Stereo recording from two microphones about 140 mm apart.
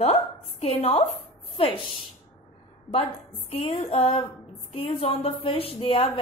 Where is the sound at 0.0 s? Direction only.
45° left (ahead or behind).